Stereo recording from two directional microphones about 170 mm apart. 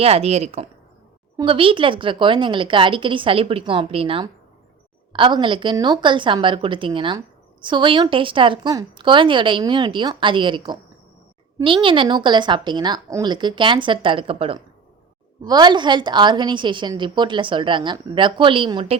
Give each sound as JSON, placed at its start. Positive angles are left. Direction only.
{"t": 0.0, "sound": "a woman's voice", "side_deg": -35}